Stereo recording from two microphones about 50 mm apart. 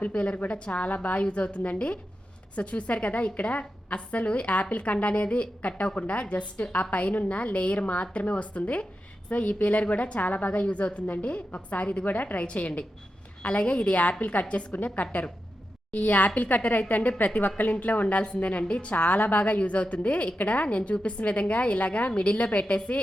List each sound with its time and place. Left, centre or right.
0.1 s a woman's voice: left